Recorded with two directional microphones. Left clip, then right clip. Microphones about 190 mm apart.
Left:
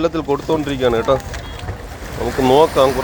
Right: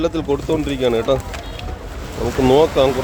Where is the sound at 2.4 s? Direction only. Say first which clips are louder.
Left 1 dB; 10° right (ahead or behind).